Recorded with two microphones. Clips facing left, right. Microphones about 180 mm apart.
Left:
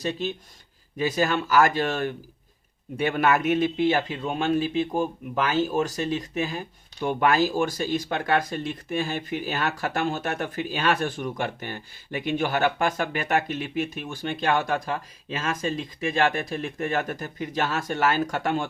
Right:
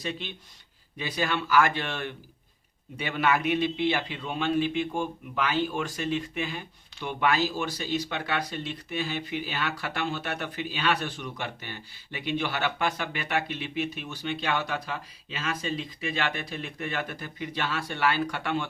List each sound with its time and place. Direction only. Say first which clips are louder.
0.0 s speech: left 7 dB; 40° left (ahead or behind)